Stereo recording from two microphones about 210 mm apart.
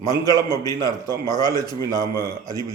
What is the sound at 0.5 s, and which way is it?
Speech, 20° left (ahead or behind).